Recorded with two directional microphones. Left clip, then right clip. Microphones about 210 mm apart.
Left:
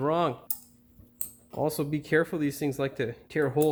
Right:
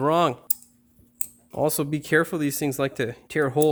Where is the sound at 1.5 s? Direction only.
50° right (ahead or behind).